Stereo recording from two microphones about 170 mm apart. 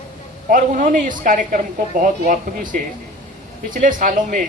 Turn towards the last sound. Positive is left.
turn(degrees=-50)  # may be behind; listen again after turning